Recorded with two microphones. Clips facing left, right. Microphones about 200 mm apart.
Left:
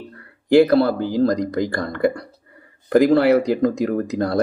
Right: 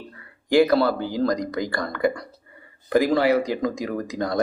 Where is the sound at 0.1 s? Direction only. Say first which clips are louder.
Left 6 dB; 55° left (ahead or behind).